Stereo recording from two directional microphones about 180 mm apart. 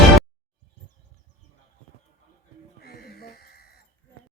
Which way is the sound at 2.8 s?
60° left (ahead or behind).